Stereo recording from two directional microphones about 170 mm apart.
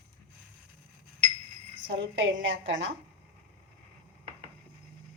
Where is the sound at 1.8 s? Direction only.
90° right.